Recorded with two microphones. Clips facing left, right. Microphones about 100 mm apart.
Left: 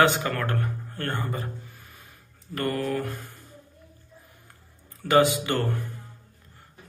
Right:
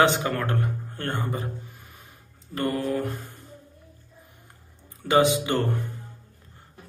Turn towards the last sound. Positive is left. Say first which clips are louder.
# right 2 dB
turn(degrees=-20)  # may be behind; listen again after turning